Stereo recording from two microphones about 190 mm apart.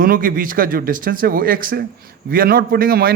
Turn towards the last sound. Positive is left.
turn(degrees=-50)  # may be behind; listen again after turning